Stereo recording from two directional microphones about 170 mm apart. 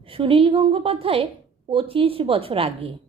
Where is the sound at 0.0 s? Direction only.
30° right (ahead or behind).